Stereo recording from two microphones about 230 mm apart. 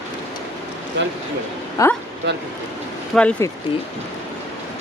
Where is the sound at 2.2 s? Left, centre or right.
Right.